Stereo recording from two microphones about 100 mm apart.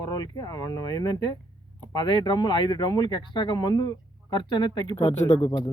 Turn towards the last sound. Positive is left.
turn(degrees=75)  # may be behind; listen again after turning